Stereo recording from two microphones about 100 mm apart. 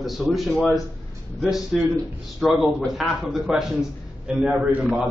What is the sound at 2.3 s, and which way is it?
A man's voice, centre (ahead or behind).